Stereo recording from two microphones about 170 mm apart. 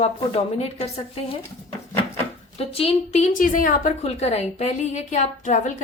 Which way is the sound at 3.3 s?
50° left (ahead or behind).